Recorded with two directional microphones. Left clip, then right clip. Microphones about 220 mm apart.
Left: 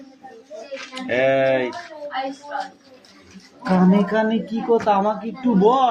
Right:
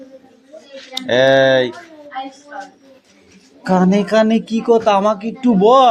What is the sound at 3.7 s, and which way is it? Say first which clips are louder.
Speech: right 5 dB; 45° right (ahead or behind).